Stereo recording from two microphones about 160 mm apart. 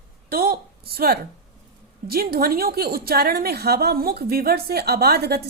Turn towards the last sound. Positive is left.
turn(degrees=-85)